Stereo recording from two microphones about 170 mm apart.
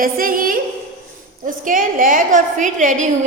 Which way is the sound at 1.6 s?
50° right (ahead or behind).